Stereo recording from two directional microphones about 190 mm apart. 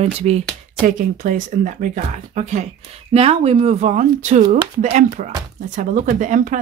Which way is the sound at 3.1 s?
30° right (ahead or behind).